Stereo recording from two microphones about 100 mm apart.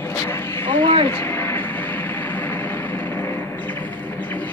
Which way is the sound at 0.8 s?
55° right (ahead or behind).